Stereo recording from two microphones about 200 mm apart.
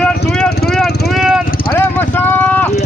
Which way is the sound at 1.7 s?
10° left (ahead or behind).